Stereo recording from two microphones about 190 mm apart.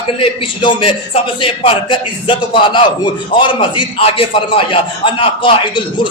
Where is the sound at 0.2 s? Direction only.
25° left (ahead or behind).